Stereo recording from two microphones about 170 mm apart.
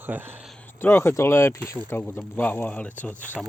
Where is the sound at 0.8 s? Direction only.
15° left (ahead or behind).